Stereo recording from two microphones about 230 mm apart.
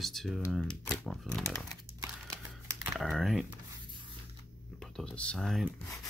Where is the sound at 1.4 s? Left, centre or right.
Centre.